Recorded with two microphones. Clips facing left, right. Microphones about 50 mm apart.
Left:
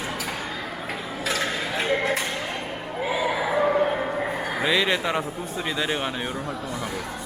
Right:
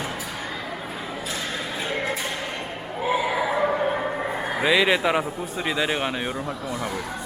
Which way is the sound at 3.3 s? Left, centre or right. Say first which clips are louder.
Left 1 dB; centre.